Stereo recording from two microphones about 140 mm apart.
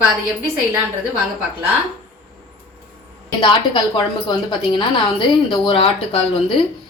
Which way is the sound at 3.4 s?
35° left (ahead or behind).